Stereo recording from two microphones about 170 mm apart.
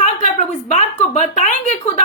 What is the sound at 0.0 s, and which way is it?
A woman's voice, 45° left (ahead or behind).